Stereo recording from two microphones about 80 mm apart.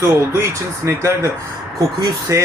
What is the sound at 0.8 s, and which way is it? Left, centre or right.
Speech, right.